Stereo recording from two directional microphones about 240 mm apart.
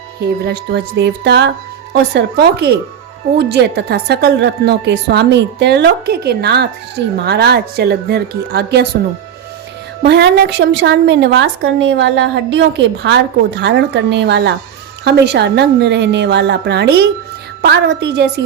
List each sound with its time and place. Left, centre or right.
0.4 s a woman's voice: right
10.0 s a woman's voice: right